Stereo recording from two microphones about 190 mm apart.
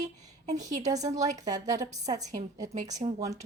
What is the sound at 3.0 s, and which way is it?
Speech, 30° right (ahead or behind).